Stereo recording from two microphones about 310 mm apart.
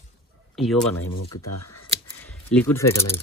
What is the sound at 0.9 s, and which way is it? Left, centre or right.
Speech, left.